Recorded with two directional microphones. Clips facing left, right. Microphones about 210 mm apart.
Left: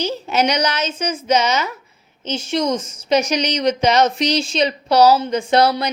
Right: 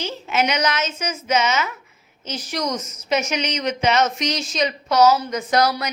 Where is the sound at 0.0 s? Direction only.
35° left (ahead or behind).